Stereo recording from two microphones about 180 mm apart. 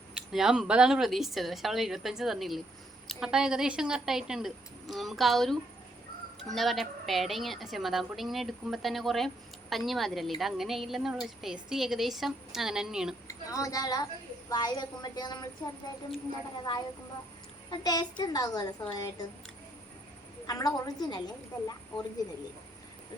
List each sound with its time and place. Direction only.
0.1 s a woman's voice: 5° right (ahead or behind)
13.2 s a woman's voice: 20° left (ahead or behind)
17.7 s a woman's voice: 20° left (ahead or behind)
20.5 s a woman's voice: 20° left (ahead or behind)